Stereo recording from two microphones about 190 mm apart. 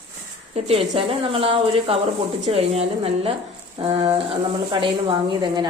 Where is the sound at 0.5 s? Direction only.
30° right (ahead or behind).